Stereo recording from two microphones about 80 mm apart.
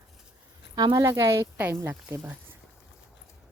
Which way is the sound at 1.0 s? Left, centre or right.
Right.